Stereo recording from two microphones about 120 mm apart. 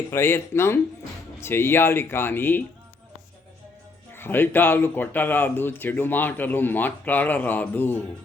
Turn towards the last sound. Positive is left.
turn(degrees=15)  # may be behind; listen again after turning